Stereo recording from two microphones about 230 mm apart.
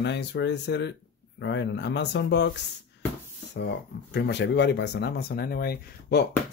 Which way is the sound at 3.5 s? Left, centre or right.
Left.